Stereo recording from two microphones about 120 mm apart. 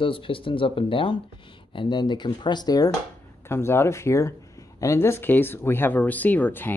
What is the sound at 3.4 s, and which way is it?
Speech, 20° left (ahead or behind).